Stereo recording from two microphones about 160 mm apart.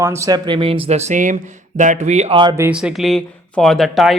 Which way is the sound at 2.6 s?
5° right (ahead or behind).